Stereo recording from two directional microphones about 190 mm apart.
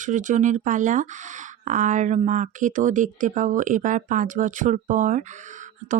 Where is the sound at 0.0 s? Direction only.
40° right (ahead or behind).